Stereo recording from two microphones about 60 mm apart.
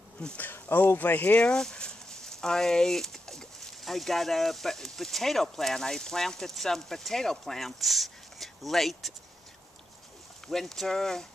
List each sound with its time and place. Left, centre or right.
0.4 s speech: left
1.4 s speech: centre
10.5 s speech: centre